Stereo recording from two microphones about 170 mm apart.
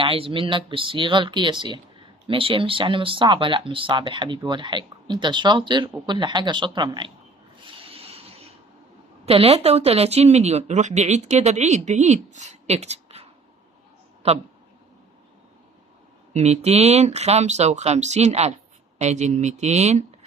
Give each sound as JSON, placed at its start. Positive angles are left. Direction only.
{"t": 0.0, "sound": "speech", "side_deg": -30}
{"t": 7.9, "sound": "a sound", "side_deg": -35}
{"t": 9.2, "sound": "speech", "side_deg": -35}
{"t": 14.2, "sound": "a man's voice", "side_deg": -40}
{"t": 16.3, "sound": "speech", "side_deg": -40}